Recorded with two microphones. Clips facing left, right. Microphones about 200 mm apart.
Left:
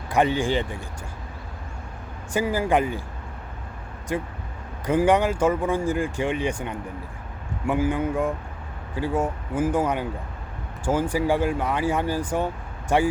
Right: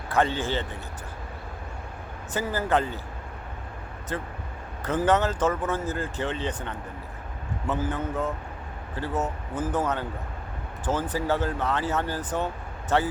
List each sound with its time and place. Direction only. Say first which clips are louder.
0.1 s speech: left 4 dB; 15° left (ahead or behind)
2.3 s speech: left 4 dB; 10° left (ahead or behind)
4.1 s speech: left 5 dB; 15° left (ahead or behind)